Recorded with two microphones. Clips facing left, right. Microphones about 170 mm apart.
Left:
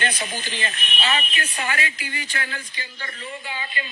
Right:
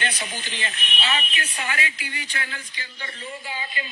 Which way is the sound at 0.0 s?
45° left (ahead or behind).